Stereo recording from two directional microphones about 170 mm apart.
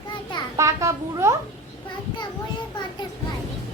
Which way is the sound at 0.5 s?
15° right (ahead or behind).